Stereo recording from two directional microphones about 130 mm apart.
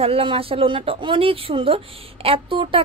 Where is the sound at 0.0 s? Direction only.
45° right (ahead or behind).